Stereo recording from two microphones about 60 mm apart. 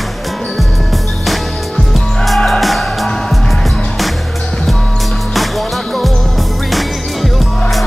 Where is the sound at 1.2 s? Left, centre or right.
Centre.